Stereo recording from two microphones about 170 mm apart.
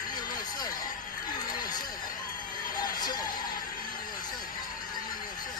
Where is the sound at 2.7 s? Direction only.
25° left (ahead or behind).